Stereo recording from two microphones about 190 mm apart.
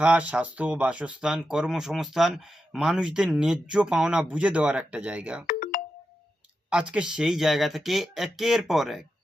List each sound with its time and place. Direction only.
0.0 s speech: 5° right (ahead or behind)
5.5 s ringtone: 45° left (ahead or behind)
6.7 s speech: 5° right (ahead or behind)